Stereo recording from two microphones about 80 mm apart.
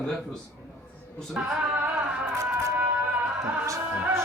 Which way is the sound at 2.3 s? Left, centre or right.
Right.